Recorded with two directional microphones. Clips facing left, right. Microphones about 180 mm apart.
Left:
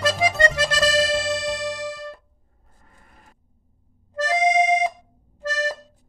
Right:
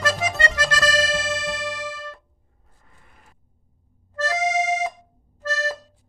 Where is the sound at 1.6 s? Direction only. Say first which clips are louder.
Left 3 dB; 20° left (ahead or behind).